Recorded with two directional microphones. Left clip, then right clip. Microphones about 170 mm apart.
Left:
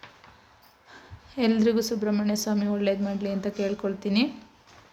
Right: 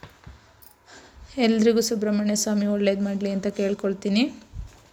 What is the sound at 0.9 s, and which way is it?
A woman's voice, 15° right (ahead or behind).